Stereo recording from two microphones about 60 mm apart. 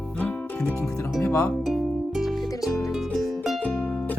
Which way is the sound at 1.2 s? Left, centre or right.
Left.